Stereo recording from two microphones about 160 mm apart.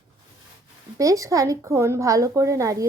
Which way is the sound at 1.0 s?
20° right (ahead or behind).